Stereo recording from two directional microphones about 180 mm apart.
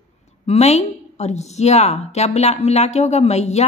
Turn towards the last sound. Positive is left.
turn(degrees=35)  # may be behind; listen again after turning